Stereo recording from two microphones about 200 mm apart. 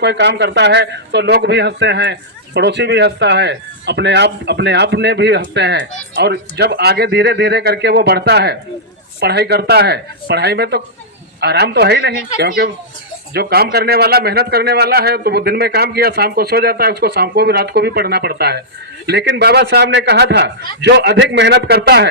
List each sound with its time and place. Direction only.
0.0 s a man's voice: 60° right (ahead or behind)